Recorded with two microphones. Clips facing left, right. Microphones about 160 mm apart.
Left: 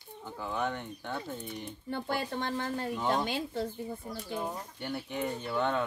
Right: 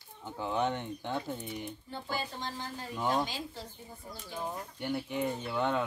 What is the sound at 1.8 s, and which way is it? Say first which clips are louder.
A woman's voice: left 7 dB; 60° left (ahead or behind).